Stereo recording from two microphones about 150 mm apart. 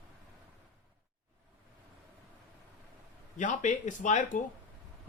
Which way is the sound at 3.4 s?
55° left (ahead or behind).